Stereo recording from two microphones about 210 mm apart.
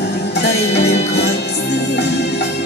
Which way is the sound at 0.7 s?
55° left (ahead or behind).